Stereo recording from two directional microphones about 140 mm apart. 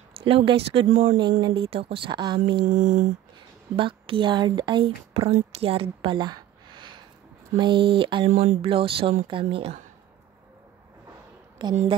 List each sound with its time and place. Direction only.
0.2 s speech: 40° right (ahead or behind)
2.6 s a sound: 65° right (ahead or behind)
3.7 s speech: 40° right (ahead or behind)
11.6 s speech: 30° right (ahead or behind)